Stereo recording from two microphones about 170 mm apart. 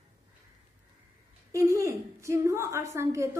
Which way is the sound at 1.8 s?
15° right (ahead or behind).